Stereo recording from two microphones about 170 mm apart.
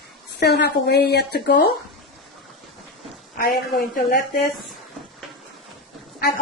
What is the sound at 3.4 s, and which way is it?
Speech, 60° left (ahead or behind).